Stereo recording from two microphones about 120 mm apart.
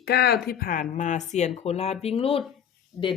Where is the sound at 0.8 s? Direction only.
90° left; by 2.4 s 55° left (ahead or behind).